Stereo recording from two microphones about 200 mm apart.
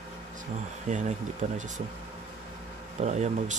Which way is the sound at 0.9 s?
40° right (ahead or behind).